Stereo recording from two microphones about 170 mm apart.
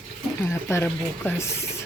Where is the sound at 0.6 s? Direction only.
15° left (ahead or behind).